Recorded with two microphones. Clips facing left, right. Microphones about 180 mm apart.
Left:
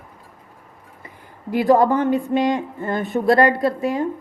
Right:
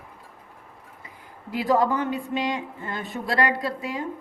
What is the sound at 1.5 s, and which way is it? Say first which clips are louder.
Speech: left 6 dB; 55° left (ahead or behind).